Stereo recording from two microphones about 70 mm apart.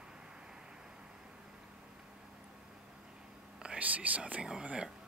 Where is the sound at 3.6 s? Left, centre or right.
Centre.